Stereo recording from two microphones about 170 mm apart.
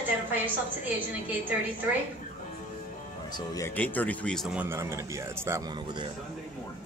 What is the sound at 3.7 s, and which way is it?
Speech, 10° left (ahead or behind).